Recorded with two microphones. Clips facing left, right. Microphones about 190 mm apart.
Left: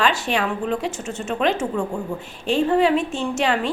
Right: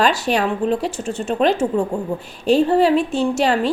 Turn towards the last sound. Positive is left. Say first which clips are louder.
# right 4 dB
turn(degrees=-35)  # may be behind; listen again after turning